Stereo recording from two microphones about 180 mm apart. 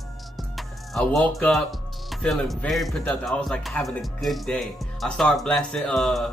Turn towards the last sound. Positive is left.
turn(degrees=0)  # may be behind; listen again after turning